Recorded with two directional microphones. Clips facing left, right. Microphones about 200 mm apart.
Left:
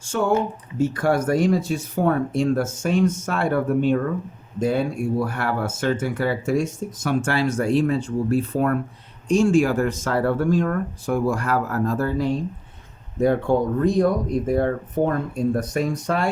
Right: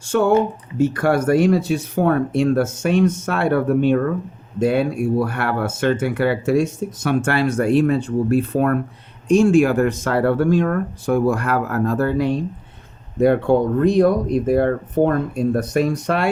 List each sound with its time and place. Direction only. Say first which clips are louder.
0.0 s speech: right 5 dB; 65° right (ahead or behind)